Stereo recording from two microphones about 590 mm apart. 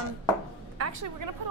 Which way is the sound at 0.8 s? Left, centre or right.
Right.